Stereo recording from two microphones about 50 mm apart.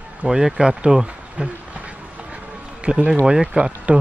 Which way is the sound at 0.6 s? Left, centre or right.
Centre.